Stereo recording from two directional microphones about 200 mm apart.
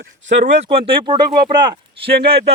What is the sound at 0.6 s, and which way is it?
Speech, 25° right (ahead or behind).